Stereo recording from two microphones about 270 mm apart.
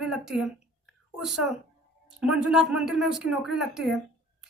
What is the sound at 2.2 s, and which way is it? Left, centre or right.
Speech, left.